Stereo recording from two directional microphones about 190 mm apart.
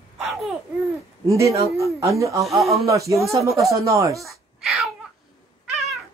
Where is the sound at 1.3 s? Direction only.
15° right (ahead or behind).